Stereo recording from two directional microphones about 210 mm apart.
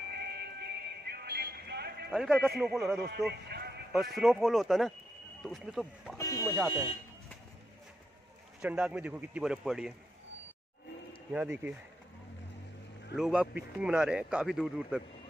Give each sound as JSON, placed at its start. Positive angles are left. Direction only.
{"t": 0.1, "sound": "music", "side_deg": -50}
{"t": 2.1, "sound": "a man's voice", "side_deg": 0}
{"t": 3.0, "sound": "a man's voice", "side_deg": -50}
{"t": 3.9, "sound": "a man's voice", "side_deg": 0}
{"t": 6.1, "sound": "speech", "side_deg": 15}
{"t": 8.5, "sound": "a man's voice", "side_deg": -5}
{"t": 11.3, "sound": "speech", "side_deg": -5}
{"t": 13.1, "sound": "a man's voice", "side_deg": -5}